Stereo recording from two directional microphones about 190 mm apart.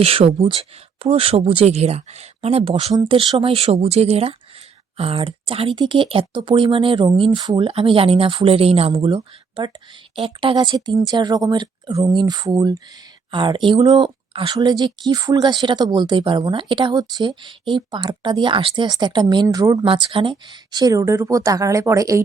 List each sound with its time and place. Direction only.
0.0 s speech: 30° right (ahead or behind)